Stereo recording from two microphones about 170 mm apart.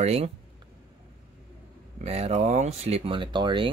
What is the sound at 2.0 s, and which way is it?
Speech, 40° right (ahead or behind).